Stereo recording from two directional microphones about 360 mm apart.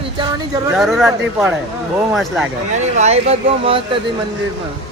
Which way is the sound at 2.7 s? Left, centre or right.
Centre.